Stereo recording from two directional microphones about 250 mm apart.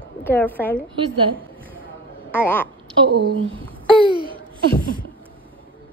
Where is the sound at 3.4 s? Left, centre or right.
Right.